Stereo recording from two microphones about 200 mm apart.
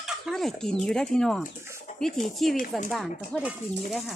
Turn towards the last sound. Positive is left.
turn(degrees=-5)  # may be behind; listen again after turning